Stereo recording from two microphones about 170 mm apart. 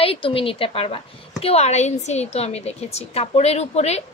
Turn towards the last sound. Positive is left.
turn(degrees=40)  # may be behind; listen again after turning